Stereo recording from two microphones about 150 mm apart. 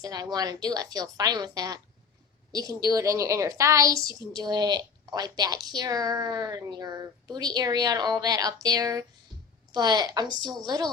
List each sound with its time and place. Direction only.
0.0 s a woman's voice: 25° right (ahead or behind)